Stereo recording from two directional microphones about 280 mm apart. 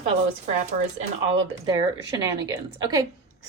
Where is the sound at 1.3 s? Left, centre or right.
Centre.